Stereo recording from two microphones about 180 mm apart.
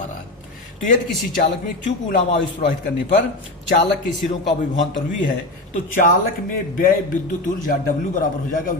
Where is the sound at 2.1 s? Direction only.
45° left (ahead or behind).